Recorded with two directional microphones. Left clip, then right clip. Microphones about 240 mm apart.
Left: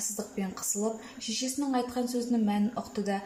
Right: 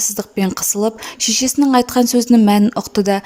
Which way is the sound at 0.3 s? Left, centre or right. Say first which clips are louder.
Right 17 dB; right.